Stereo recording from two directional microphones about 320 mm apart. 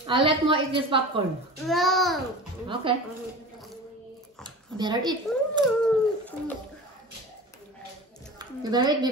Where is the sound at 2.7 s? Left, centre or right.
Centre.